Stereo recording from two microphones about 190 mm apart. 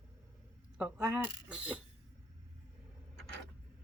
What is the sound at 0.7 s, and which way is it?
Speech, 5° right (ahead or behind).